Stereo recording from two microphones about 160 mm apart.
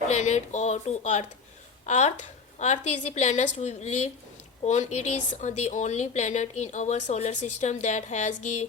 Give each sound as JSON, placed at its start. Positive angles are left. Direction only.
{"t": 0.1, "sound": "a woman's voice", "side_deg": 45}